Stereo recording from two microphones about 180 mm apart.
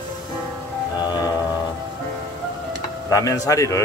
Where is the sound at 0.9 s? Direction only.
25° left (ahead or behind).